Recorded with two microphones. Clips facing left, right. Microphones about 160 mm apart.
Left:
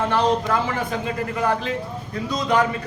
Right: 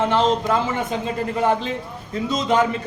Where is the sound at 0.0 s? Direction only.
20° right (ahead or behind).